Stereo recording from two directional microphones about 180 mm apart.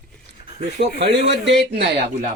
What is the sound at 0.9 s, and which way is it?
Speech, 70° right (ahead or behind).